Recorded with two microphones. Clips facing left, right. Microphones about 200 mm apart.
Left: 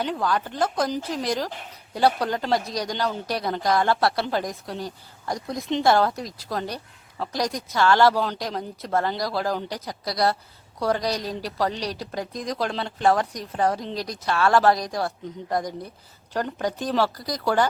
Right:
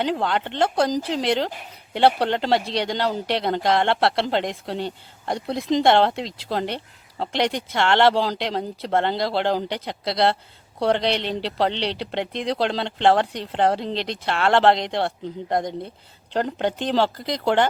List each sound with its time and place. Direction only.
0.0 s speech: 25° right (ahead or behind)